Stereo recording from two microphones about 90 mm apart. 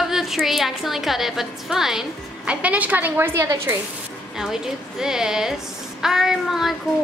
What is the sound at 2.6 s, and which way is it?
Speech, 15° right (ahead or behind).